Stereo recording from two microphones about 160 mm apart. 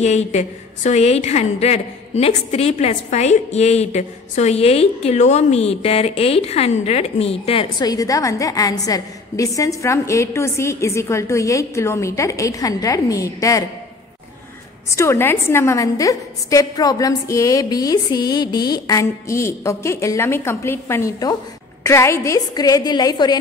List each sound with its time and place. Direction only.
0.0 s a woman's voice: 45° left (ahead or behind)
7.8 s a woman's voice: 20° left (ahead or behind)
14.9 s a woman's voice: 15° left (ahead or behind)